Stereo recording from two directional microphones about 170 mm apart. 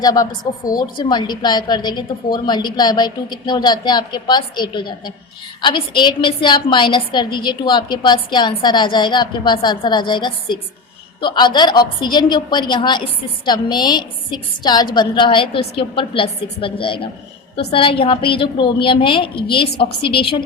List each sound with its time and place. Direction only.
0.0 s a woman's voice: 20° left (ahead or behind)